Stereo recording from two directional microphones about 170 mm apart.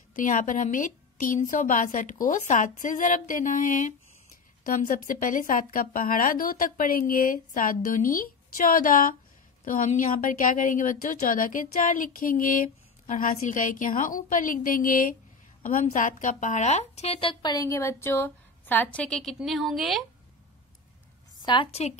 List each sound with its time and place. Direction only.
0.1 s a woman's voice: 50° left (ahead or behind); by 20.1 s centre (ahead or behind)
21.4 s a woman's voice: 30° left (ahead or behind)